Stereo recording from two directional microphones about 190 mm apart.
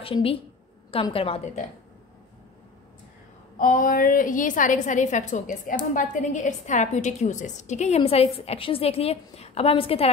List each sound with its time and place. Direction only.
0.0 s a woman's voice: 30° left (ahead or behind)
3.5 s a woman's voice: 45° left (ahead or behind)